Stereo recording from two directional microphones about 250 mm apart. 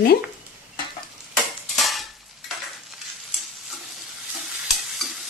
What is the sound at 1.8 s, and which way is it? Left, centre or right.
Stir, centre.